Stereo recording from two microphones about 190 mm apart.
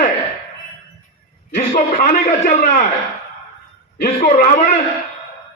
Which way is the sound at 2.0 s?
40° left (ahead or behind).